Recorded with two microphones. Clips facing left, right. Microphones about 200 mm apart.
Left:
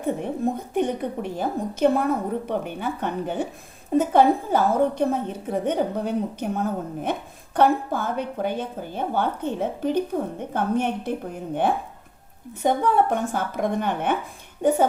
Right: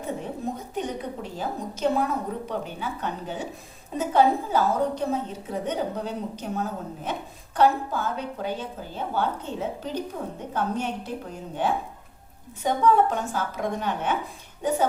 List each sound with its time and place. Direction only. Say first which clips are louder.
0.0 s a woman's voice: left 6 dB; 55° left (ahead or behind)
12.6 s a woman's voice: left 1 dB; 55° left (ahead or behind)